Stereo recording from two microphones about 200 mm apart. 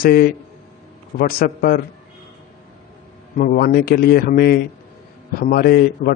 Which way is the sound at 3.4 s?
45° left (ahead or behind).